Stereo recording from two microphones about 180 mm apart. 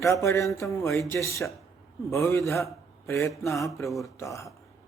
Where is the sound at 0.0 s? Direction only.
15° left (ahead or behind).